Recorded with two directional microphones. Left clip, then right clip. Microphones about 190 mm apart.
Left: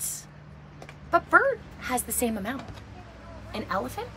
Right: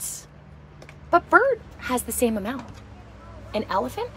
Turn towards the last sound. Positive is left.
turn(degrees=-25)  # may be behind; listen again after turning